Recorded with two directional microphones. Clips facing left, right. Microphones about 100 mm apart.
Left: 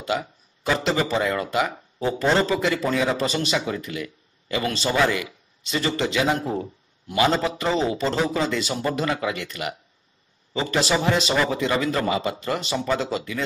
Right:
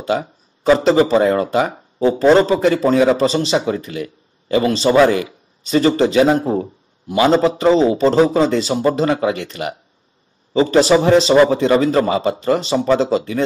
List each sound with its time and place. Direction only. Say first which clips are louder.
0.0 s speech: right 6 dB; 30° right (ahead or behind)